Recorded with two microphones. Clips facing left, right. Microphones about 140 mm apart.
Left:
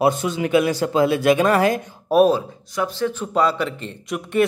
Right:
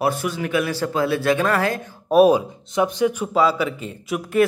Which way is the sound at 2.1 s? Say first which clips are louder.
Right 1 dB; 10° right (ahead or behind).